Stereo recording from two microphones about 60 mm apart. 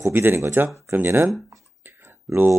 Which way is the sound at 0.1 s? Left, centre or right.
Right.